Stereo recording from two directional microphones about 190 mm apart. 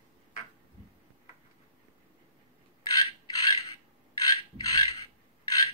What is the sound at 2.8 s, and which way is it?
Mechanisms, 20° left (ahead or behind).